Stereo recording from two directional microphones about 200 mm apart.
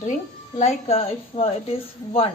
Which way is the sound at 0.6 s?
30° left (ahead or behind).